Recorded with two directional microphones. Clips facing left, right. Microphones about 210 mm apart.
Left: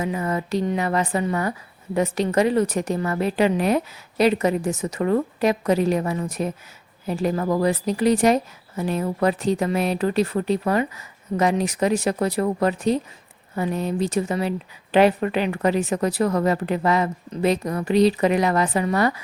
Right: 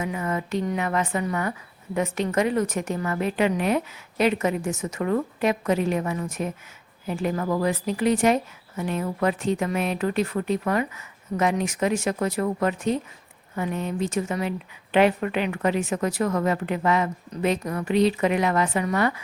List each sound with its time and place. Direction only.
0.0 s a woman's voice: 35° left (ahead or behind)